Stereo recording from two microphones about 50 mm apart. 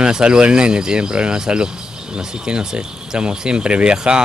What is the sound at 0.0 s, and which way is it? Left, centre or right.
Speech, centre.